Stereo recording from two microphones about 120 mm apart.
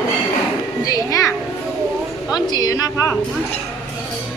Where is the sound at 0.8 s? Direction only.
30° left (ahead or behind).